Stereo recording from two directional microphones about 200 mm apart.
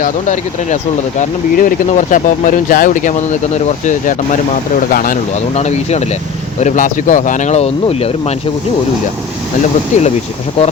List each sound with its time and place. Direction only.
0.0 s speech: 40° left (ahead or behind)
5.5 s speech: 35° left (ahead or behind)
9.9 s speech: 35° left (ahead or behind)